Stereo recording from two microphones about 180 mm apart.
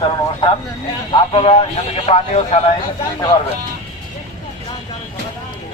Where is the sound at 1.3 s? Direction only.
30° left (ahead or behind).